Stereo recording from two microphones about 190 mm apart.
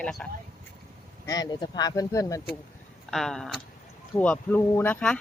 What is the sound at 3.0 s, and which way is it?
Speech, centre (ahead or behind).